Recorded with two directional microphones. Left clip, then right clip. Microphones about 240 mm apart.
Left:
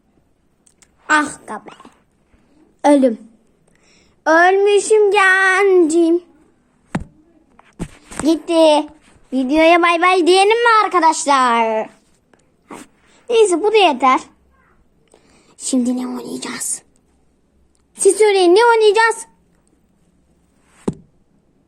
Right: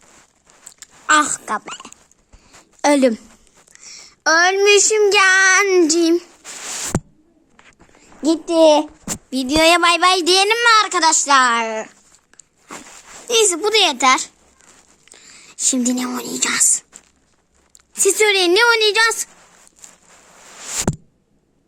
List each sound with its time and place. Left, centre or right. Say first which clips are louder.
0.8 s a sound: right 1 dB; right
2.8 s a woman's voice: left 2 dB; right
7.5 s a sound: right 2 dB; centre
8.2 s speech: left 1 dB; centre
9.5 s speech: left 1 dB; right
13.2 s a woman's voice: left 3 dB; right
15.1 s whispering: right 8 dB; right
18.0 s a woman's voice: left 3 dB; right